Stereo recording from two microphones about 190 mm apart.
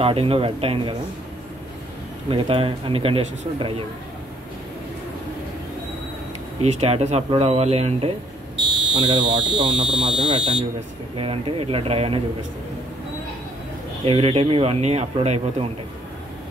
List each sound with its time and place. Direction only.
0.0 s speech: 30° right (ahead or behind)
2.2 s speech: 30° right (ahead or behind)
6.6 s speech: 35° right (ahead or behind)
14.0 s speech: 30° right (ahead or behind)